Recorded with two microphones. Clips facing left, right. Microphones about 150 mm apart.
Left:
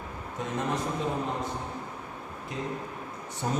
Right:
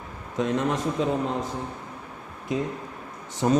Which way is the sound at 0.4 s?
90° right.